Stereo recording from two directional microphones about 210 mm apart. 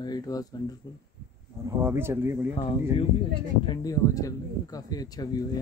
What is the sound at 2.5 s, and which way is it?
Speech, 25° left (ahead or behind).